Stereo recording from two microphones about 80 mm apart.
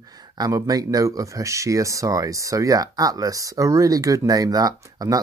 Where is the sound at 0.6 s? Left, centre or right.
Right.